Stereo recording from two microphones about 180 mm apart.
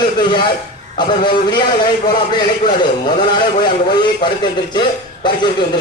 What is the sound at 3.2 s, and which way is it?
Speech, 25° left (ahead or behind).